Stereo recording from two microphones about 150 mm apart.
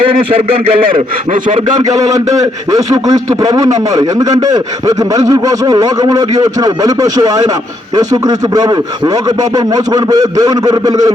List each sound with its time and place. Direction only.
1.3 s speech: 55° right (ahead or behind)
2.0 s a man's voice: 25° right (ahead or behind)